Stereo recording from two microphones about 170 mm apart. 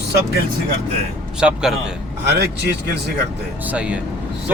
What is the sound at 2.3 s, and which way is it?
Speech, 75° right (ahead or behind).